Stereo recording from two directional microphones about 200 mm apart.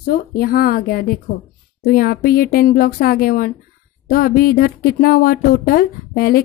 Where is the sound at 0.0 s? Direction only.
45° left (ahead or behind).